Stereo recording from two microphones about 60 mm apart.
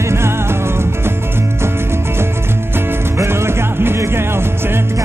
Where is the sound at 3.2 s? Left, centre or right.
Right.